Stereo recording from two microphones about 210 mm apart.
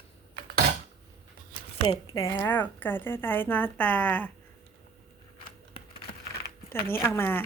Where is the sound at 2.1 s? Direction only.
15° left (ahead or behind).